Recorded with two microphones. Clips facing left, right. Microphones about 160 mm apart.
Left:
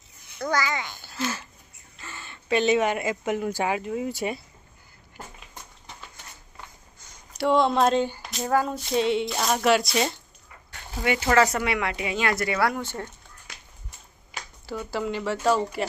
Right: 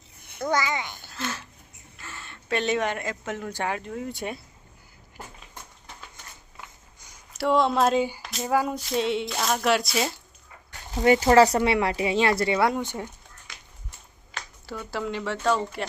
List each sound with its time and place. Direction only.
0.5 s a child's voice: 20° right (ahead or behind)
1.0 s a sound: 5° left (ahead or behind)
2.0 s speech: centre (ahead or behind)
6.6 s a sound: 5° right (ahead or behind)
8.2 s speech: centre (ahead or behind)
11.0 s speech: 40° right (ahead or behind); by 13.1 s 15° right (ahead or behind)
14.3 s speech: centre (ahead or behind)